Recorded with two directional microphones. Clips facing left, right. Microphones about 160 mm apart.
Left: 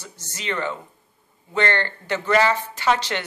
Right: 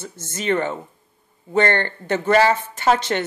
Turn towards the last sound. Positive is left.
turn(degrees=-45)  # may be behind; listen again after turning